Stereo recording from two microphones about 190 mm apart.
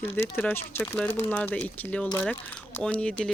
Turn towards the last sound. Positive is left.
turn(degrees=5)  # may be behind; listen again after turning